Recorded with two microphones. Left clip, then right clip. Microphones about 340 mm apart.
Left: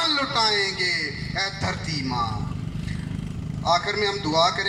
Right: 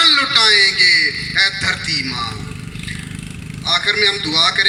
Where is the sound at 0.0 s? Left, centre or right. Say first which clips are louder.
Right 10 dB; left.